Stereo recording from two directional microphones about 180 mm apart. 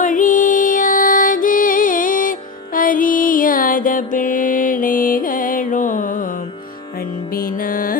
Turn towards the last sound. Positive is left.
turn(degrees=50)  # may be behind; listen again after turning